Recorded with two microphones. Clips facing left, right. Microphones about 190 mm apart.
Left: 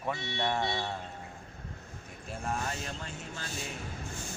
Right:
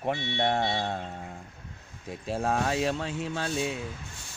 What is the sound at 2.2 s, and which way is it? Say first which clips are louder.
Speech: right 8 dB; 85° right.